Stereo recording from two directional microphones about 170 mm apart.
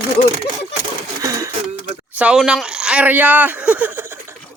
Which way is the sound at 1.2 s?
20° right (ahead or behind).